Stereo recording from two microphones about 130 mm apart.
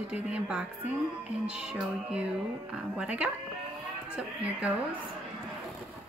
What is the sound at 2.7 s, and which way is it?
A woman's voice, 10° right (ahead or behind).